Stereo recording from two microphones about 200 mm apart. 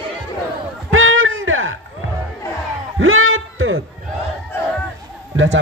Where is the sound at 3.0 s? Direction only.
90° right.